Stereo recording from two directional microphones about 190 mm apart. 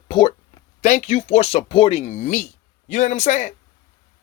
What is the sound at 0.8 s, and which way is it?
Speech, 40° left (ahead or behind).